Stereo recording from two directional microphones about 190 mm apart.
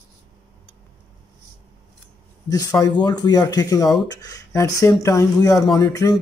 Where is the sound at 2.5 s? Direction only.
20° left (ahead or behind).